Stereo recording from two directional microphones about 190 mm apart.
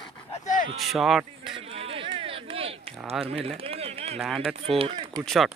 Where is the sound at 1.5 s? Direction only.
30° right (ahead or behind).